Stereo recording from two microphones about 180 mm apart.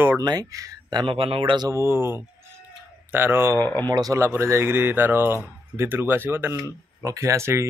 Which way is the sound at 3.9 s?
20° right (ahead or behind).